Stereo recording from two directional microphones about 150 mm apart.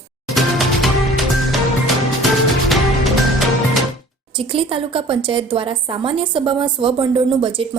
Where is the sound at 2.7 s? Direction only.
Centre (ahead or behind).